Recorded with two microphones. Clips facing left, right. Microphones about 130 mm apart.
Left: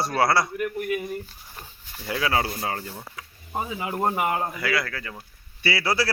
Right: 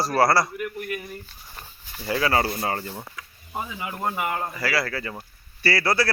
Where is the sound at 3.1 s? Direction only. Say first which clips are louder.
Left 6 dB; 25° left (ahead or behind).